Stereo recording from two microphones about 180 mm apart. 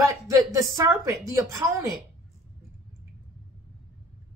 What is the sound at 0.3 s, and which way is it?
A woman's voice, 20° right (ahead or behind).